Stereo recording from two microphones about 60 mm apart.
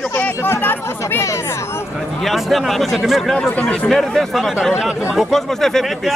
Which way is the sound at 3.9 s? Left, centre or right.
Centre.